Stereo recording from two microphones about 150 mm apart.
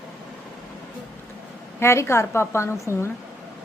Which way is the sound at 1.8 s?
20° left (ahead or behind).